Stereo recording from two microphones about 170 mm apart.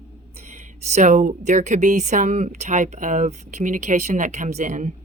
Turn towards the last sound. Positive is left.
turn(degrees=-45)  # may be behind; listen again after turning